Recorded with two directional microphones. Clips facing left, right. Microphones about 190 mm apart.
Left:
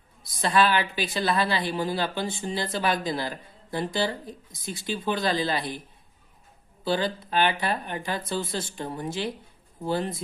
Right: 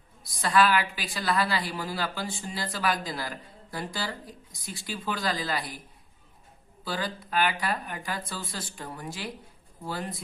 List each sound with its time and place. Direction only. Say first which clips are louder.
0.3 s a woman's voice: left 1 dB; 25° left (ahead or behind)
6.8 s a woman's voice: left 7 dB; 25° left (ahead or behind)